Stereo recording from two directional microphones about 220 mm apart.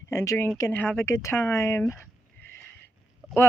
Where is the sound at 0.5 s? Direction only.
10° left (ahead or behind).